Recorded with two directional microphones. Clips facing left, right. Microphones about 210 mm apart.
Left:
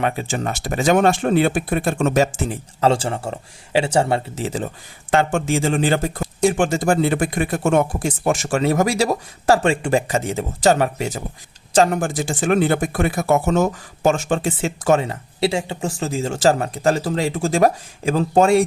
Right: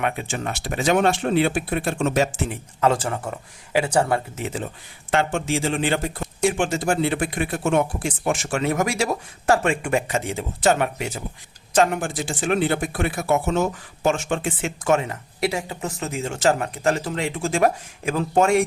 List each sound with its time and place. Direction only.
0.0 s speech: 35° left (ahead or behind)
2.8 s speech: 30° left (ahead or behind)
5.1 s speech: 45° left (ahead or behind)